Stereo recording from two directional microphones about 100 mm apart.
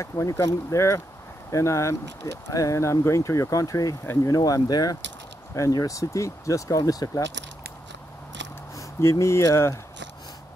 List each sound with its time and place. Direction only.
0.0 s speech: 30° left (ahead or behind)
4.0 s speech: 25° left (ahead or behind)
4.3 s speech: 35° left (ahead or behind)
8.7 s speech: 30° left (ahead or behind)